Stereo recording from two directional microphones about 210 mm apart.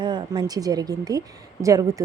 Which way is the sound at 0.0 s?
20° right (ahead or behind).